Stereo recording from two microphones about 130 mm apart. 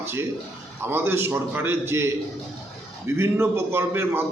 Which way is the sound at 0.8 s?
15° right (ahead or behind).